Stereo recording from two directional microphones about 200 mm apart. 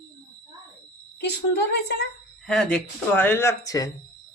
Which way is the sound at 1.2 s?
55° left (ahead or behind).